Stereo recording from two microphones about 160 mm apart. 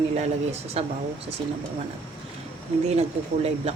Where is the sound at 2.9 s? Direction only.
40° right (ahead or behind).